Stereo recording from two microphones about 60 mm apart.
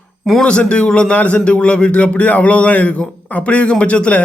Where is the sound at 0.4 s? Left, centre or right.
Centre.